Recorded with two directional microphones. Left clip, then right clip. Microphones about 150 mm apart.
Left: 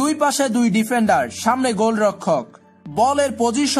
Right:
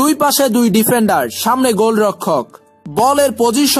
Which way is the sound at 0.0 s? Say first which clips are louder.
Right 6 dB; 35° right (ahead or behind).